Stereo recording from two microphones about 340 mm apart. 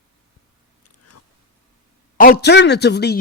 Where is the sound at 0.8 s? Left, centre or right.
Left.